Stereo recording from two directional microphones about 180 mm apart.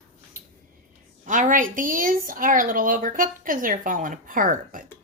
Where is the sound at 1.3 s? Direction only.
45° right (ahead or behind).